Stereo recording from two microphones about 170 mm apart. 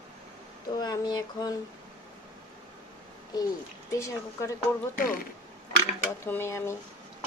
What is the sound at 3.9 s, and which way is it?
Speech, 20° left (ahead or behind).